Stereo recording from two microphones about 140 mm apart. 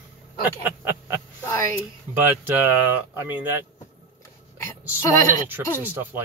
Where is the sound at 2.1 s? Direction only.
15° right (ahead or behind).